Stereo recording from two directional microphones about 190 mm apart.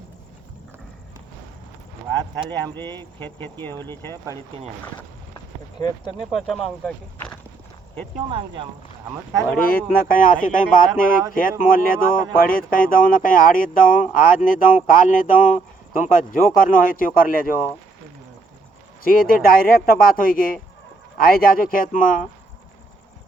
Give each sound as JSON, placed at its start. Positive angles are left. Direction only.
{"t": 2.7, "sound": "speech", "side_deg": 15}
{"t": 5.8, "sound": "speech", "side_deg": 20}
{"t": 6.3, "sound": "speech", "side_deg": 0}
{"t": 8.3, "sound": "speech", "side_deg": -25}
{"t": 9.7, "sound": "speech", "side_deg": 50}
{"t": 19.0, "sound": "speech", "side_deg": 50}